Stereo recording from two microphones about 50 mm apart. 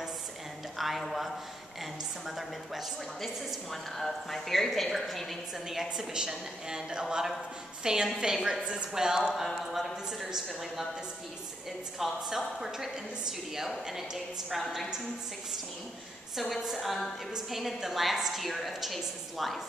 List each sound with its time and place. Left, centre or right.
0.7 s a man's voice: centre
5.8 s a woman's voice: centre
12.0 s a woman's voice: centre
16.3 s a woman's voice: centre